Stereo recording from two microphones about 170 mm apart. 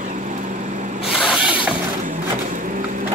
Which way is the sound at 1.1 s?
Centre (ahead or behind).